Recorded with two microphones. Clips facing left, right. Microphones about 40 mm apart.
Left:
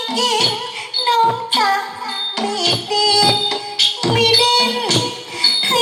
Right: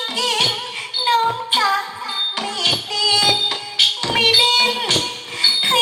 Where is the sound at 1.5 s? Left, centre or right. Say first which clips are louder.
Left 2 dB; right.